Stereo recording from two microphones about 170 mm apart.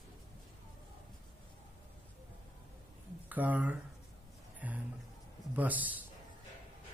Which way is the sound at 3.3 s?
10° right (ahead or behind).